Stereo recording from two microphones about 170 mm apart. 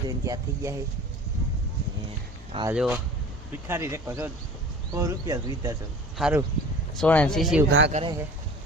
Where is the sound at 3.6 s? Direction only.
15° right (ahead or behind).